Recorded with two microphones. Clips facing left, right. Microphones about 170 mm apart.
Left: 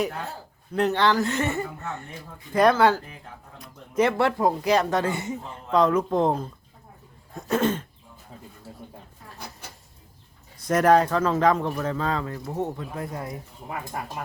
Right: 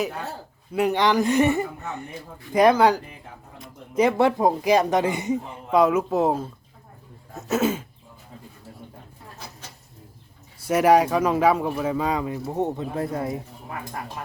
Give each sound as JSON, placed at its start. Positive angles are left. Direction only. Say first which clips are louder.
{"t": 0.7, "sound": "speech", "louder": "right 1 dB", "side_deg": -10}
{"t": 7.3, "sound": "a sound", "louder": "right 1 dB", "side_deg": -5}
{"t": 10.7, "sound": "speech", "louder": "right 1 dB", "side_deg": -10}